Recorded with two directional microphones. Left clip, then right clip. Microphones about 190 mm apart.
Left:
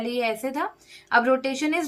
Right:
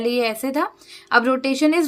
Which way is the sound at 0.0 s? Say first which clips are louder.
Right 5 dB; 55° right (ahead or behind).